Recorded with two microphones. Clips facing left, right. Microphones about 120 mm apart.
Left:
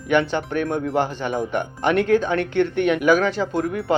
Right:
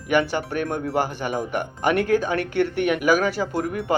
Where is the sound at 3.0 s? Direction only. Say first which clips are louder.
Left 2 dB; 5° right (ahead or behind).